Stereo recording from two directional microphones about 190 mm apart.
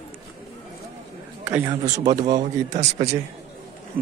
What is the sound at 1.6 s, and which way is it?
Speech, 20° right (ahead or behind).